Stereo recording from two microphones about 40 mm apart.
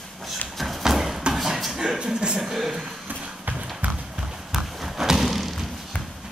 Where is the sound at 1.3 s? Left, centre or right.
Centre; by 2.3 s right.